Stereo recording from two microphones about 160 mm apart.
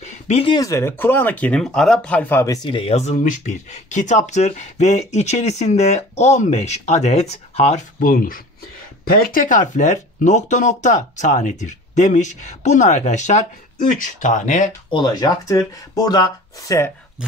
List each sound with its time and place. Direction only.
0.0 s a sound: 45° left (ahead or behind)
0.5 s speech: 20° left (ahead or behind)
2.7 s speech: 40° left (ahead or behind)
8.0 s speech: 60° left (ahead or behind)
14.9 s speech: 25° left (ahead or behind)